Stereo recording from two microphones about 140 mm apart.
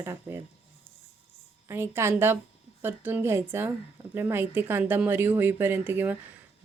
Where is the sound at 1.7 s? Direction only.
15° right (ahead or behind).